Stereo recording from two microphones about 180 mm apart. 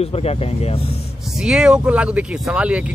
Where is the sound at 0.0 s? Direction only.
35° left (ahead or behind).